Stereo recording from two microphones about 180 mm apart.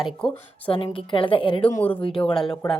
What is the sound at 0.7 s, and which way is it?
A woman's voice, 30° left (ahead or behind).